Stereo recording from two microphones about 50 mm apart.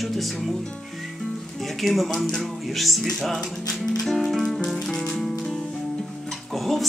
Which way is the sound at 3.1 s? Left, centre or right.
Centre.